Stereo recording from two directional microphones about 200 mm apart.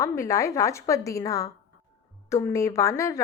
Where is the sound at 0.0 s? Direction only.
15° left (ahead or behind).